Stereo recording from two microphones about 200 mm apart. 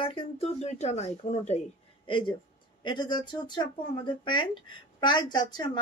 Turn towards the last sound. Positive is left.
turn(degrees=20)  # may be behind; listen again after turning